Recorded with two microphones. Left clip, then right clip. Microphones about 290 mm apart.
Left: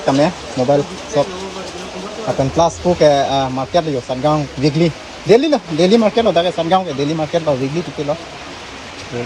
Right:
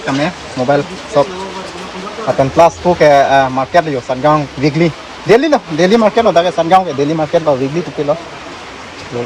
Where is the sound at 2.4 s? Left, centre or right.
Centre.